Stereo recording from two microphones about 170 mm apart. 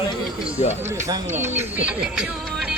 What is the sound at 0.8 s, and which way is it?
A woman's voice, 15° right (ahead or behind).